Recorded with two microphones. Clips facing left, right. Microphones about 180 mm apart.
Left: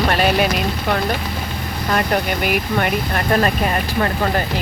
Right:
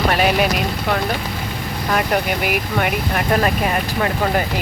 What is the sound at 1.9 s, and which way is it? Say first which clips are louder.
Speech: even; 5° right (ahead or behind).